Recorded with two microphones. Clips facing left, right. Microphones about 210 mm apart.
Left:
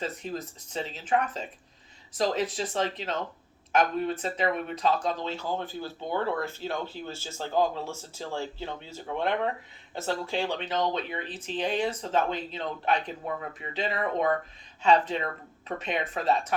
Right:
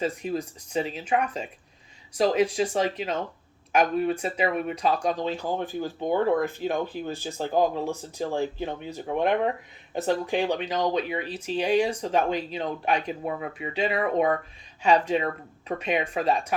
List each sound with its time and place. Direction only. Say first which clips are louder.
0.0 s speech: right 6 dB; 10° right (ahead or behind)